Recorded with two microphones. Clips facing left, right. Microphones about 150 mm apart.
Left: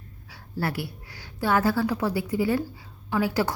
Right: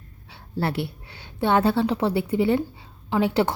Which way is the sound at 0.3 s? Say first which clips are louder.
Right 3 dB; 25° right (ahead or behind).